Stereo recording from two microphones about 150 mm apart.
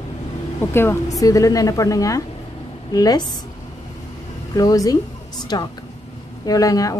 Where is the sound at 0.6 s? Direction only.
15° left (ahead or behind).